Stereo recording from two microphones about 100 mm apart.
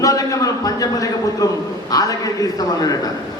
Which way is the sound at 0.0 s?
35° left (ahead or behind).